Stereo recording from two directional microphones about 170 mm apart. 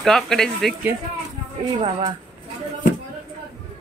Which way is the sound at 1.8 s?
30° right (ahead or behind).